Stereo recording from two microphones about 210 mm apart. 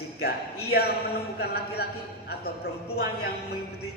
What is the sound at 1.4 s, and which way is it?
Speech, 50° left (ahead or behind).